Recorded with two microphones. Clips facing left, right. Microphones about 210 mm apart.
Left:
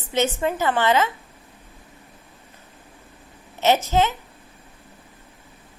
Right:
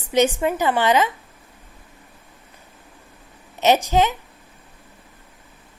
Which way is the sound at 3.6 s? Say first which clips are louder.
Right 2 dB; 15° right (ahead or behind).